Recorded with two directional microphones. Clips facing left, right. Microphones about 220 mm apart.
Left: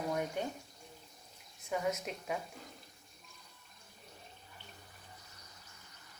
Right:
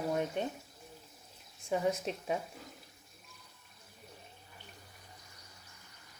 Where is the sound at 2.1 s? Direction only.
30° right (ahead or behind).